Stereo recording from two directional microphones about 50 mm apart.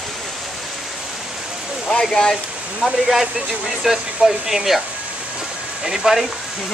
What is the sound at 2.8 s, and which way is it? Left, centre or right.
Speech, centre.